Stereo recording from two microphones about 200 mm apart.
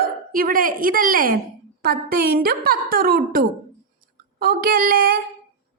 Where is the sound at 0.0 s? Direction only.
45° right (ahead or behind).